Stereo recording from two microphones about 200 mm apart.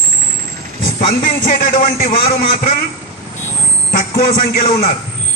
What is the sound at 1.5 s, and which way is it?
A man's voice, 45° left (ahead or behind).